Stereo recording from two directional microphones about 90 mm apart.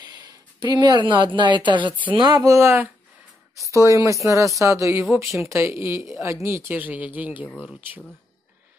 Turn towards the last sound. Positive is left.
turn(degrees=15)  # may be behind; listen again after turning